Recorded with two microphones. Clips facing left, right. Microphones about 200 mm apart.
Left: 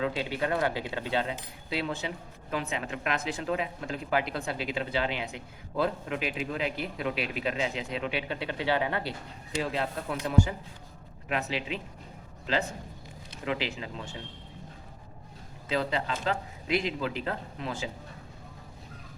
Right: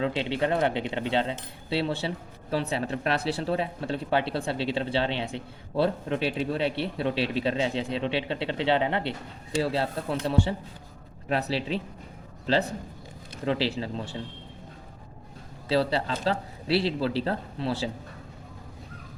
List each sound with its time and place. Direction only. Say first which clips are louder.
0.0 s speech: right 3 dB; 25° right (ahead or behind)
9.6 s a man's voice: right 4 dB; 35° right (ahead or behind)
15.7 s a man's voice: right 5 dB; 35° right (ahead or behind)